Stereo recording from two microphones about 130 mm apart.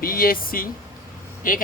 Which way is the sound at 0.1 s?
90° left.